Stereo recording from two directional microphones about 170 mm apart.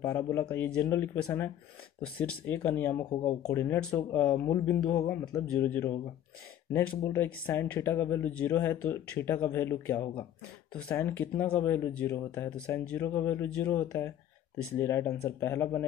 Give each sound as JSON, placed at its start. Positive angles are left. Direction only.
{"t": 0.0, "sound": "speech", "side_deg": 15}
{"t": 3.1, "sound": "speech", "side_deg": 35}
{"t": 3.4, "sound": "speech", "side_deg": 15}